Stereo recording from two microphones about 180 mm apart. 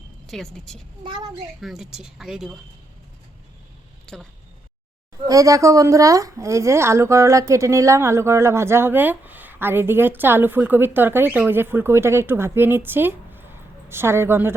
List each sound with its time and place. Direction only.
0.3 s speech: centre (ahead or behind)
1.0 s a child's voice: 25° right (ahead or behind)
1.6 s speech: centre (ahead or behind)
4.0 s speech: 5° left (ahead or behind)
5.3 s speech: 20° right (ahead or behind)